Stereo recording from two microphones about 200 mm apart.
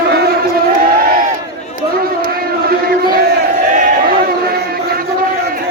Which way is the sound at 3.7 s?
40° right (ahead or behind).